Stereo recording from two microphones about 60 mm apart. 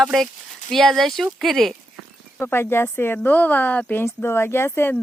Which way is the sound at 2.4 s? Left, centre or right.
Left.